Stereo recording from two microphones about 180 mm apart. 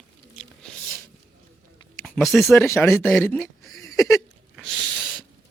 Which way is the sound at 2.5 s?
15° left (ahead or behind).